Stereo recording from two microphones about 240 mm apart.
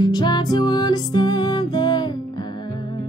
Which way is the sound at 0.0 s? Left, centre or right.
Centre.